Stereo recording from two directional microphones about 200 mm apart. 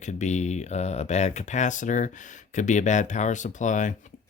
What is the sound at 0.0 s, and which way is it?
Speech, 35° left (ahead or behind).